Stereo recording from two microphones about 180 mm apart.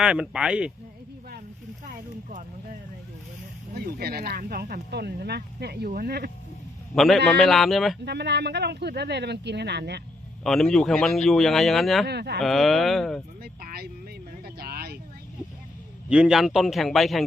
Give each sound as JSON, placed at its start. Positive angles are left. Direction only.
{"t": 0.0, "sound": "a man's voice", "side_deg": -5}
{"t": 1.8, "sound": "a sound", "side_deg": -45}
{"t": 3.8, "sound": "speech", "side_deg": -60}
{"t": 6.9, "sound": "a man's voice", "side_deg": 0}
{"t": 8.0, "sound": "speech", "side_deg": -70}
{"t": 10.4, "sound": "a man's voice", "side_deg": 0}
{"t": 12.0, "sound": "speech", "side_deg": -65}
{"t": 12.4, "sound": "a man's voice", "side_deg": 0}
{"t": 13.4, "sound": "vehicle", "side_deg": -55}
{"t": 14.4, "sound": "a sound", "side_deg": -60}
{"t": 16.0, "sound": "a man's voice", "side_deg": -5}